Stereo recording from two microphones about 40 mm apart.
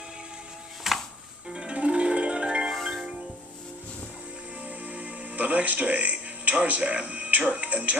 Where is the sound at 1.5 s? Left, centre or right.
Right.